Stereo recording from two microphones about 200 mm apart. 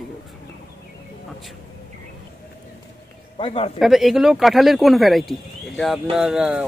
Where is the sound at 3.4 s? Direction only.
25° left (ahead or behind).